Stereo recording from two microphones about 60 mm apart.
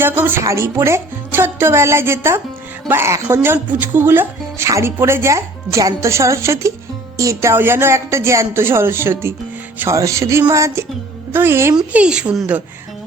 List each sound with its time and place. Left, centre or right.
0.0 s speech: right
0.4 s speech: right
4.6 s speech: right
7.2 s speech: right
7.5 s speech: right
8.5 s speech: right
9.9 s speech: right
11.3 s speech: right
11.9 s speech: centre